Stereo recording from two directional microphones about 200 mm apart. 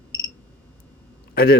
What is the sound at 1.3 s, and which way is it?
Speech, 50° left (ahead or behind).